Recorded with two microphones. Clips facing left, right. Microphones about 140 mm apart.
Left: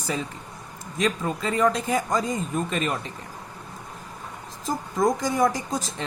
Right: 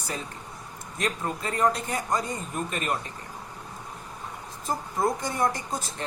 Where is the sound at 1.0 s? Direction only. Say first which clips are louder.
Left 4 dB; 90° left.